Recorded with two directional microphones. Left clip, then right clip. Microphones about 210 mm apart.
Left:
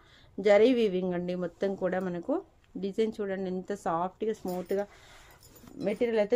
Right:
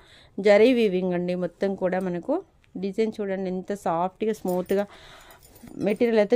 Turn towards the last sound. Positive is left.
turn(degrees=-55)  # may be behind; listen again after turning